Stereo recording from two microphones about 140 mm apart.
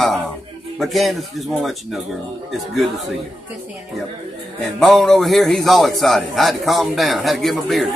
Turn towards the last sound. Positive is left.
turn(degrees=0)  # may be behind; listen again after turning